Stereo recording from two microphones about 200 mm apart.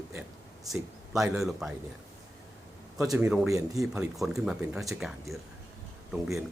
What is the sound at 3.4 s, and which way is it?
Speech, 15° right (ahead or behind).